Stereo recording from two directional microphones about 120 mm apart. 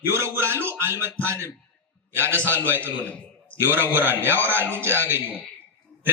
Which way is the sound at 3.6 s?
20° right (ahead or behind).